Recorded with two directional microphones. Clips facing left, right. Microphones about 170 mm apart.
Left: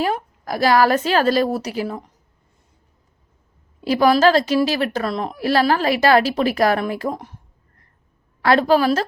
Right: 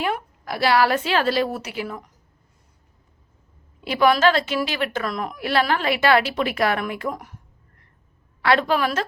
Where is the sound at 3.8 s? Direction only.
35° left (ahead or behind).